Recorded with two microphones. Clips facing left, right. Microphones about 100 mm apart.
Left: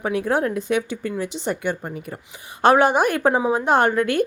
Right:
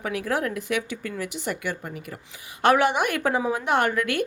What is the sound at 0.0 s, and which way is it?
A woman's voice, 30° left (ahead or behind).